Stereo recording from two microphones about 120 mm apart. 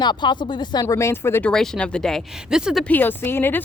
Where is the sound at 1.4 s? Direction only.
5° left (ahead or behind).